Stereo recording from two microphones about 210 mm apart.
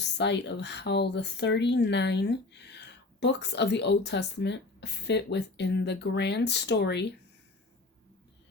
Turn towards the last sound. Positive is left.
turn(degrees=55)  # may be behind; listen again after turning